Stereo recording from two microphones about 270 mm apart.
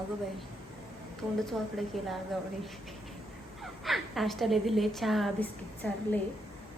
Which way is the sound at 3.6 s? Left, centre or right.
Centre.